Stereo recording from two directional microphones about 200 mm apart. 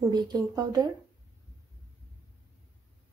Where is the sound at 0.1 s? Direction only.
20° right (ahead or behind).